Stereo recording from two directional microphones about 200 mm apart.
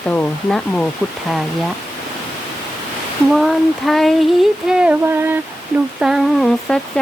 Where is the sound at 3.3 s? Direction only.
Centre (ahead or behind).